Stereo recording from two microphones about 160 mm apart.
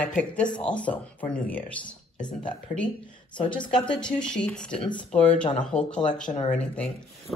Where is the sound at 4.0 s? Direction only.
5° left (ahead or behind).